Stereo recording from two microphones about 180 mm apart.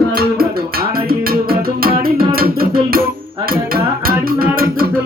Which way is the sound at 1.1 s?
55° right (ahead or behind).